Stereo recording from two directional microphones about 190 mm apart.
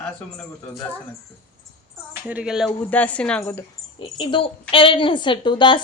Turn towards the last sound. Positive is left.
turn(degrees=25)  # may be behind; listen again after turning